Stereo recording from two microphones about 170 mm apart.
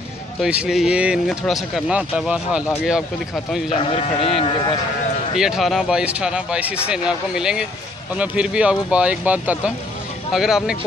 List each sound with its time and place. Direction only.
0.4 s speech: 5° right (ahead or behind)
3.9 s speech: 35° left (ahead or behind)
5.4 s speech: centre (ahead or behind)